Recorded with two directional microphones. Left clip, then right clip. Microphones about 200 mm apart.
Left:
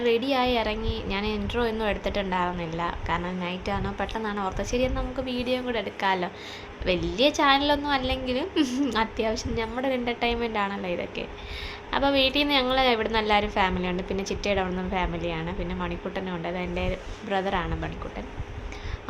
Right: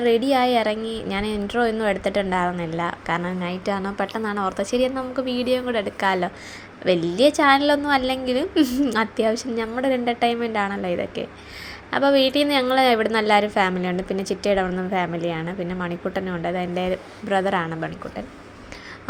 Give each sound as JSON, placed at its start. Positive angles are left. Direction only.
{"t": 0.0, "sound": "a woman's voice", "side_deg": -20}